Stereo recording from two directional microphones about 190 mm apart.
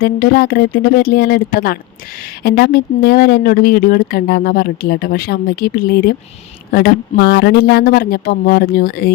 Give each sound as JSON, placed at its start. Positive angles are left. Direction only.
{"t": 0.0, "sound": "speech", "side_deg": 50}